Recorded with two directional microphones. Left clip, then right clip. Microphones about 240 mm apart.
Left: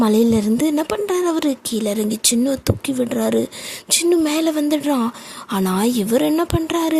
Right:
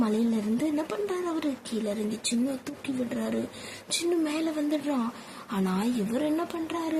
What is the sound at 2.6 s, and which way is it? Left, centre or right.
Speech, left.